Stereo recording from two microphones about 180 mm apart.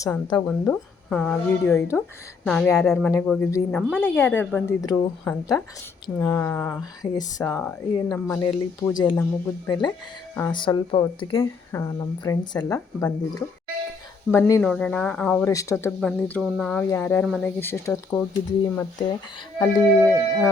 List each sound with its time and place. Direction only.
0.0 s a woman's voice: 15° left (ahead or behind)
4.0 s a woman's voice: 10° left (ahead or behind)
7.4 s a woman's voice: 10° left (ahead or behind)
14.6 s a woman's voice: 5° left (ahead or behind)
17.2 s speech: centre (ahead or behind)
17.6 s a woman's voice: 15° left (ahead or behind)
19.5 s a woman's voice: 10° left (ahead or behind)